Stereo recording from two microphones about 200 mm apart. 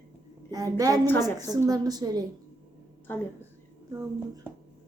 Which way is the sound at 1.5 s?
20° right (ahead or behind).